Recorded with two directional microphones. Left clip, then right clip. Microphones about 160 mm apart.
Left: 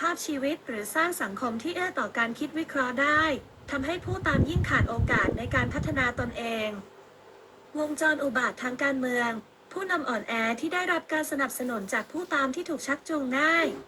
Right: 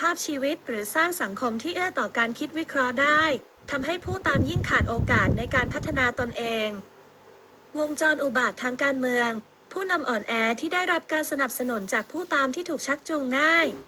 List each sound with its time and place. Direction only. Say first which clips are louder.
0.0 s a woman's voice: right 3 dB; 50° right (ahead or behind)
7.8 s a woman's voice: right 3 dB; 50° right (ahead or behind)